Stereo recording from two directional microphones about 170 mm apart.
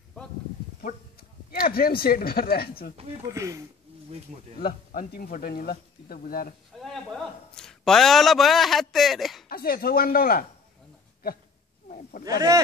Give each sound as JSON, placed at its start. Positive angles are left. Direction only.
{"t": 1.5, "sound": "speech", "side_deg": 60}
{"t": 3.3, "sound": "speech", "side_deg": -20}
{"t": 4.6, "sound": "speech", "side_deg": 60}
{"t": 6.8, "sound": "a man's voice", "side_deg": 0}
{"t": 9.5, "sound": "speech", "side_deg": 60}
{"t": 12.3, "sound": "speech", "side_deg": -20}